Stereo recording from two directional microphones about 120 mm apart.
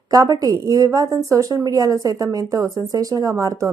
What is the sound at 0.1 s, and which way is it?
A woman's voice, 30° right (ahead or behind).